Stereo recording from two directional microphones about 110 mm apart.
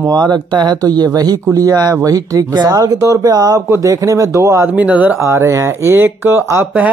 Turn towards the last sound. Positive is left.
turn(degrees=-20)  # may be behind; listen again after turning